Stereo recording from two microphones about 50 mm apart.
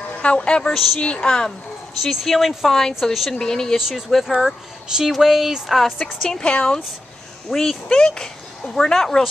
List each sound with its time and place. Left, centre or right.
0.2 s a woman's voice: left
0.7 s speech: centre
1.1 s speech: centre
2.0 s speech: centre
3.3 s speech: centre
3.7 s speech: centre
6.2 s speech: centre
6.5 s a woman's voice: left
7.4 s speech: centre
7.9 s speech: centre